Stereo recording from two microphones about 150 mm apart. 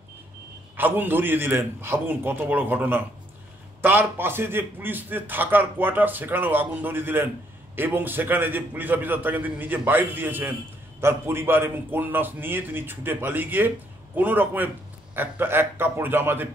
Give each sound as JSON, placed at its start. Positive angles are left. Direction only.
{"t": 0.7, "sound": "a man's voice", "side_deg": -15}